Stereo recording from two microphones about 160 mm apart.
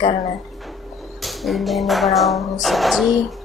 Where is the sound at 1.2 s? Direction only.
Centre (ahead or behind).